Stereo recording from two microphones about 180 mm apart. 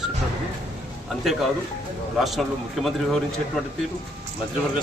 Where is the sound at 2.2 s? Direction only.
Centre (ahead or behind).